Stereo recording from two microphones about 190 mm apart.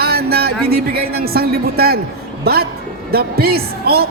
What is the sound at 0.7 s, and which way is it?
A woman's voice, 55° right (ahead or behind).